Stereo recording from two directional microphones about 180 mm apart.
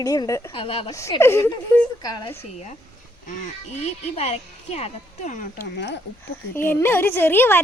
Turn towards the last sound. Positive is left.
turn(degrees=10)  # may be behind; listen again after turning